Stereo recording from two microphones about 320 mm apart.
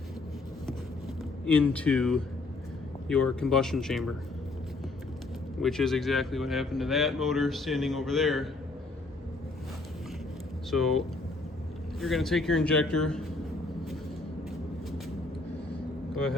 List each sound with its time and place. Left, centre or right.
1.5 s a man's voice: centre
5.6 s a man's voice: centre
10.7 s a man's voice: centre